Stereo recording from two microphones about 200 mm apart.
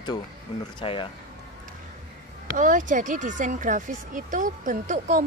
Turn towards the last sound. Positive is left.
turn(degrees=-40)  # may be behind; listen again after turning